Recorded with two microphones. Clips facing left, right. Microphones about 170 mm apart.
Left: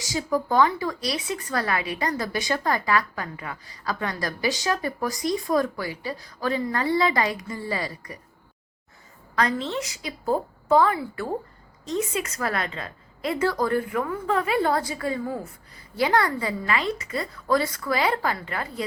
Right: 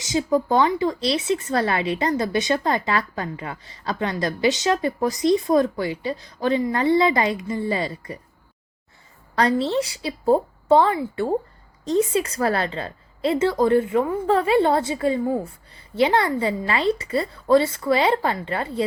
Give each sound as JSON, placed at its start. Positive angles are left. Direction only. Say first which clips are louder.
{"t": 0.0, "sound": "speech", "louder": "right 5 dB", "side_deg": -20}
{"t": 9.3, "sound": "a woman's voice", "louder": "right 5 dB", "side_deg": -30}